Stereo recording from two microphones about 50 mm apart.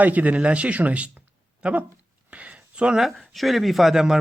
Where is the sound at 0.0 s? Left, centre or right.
Right.